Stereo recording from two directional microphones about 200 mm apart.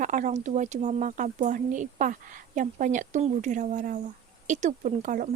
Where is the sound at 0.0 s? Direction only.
40° right (ahead or behind).